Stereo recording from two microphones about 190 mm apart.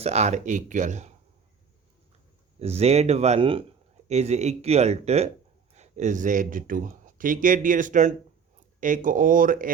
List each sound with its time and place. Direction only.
0.0 s speech: 35° right (ahead or behind)
2.6 s speech: 35° right (ahead or behind)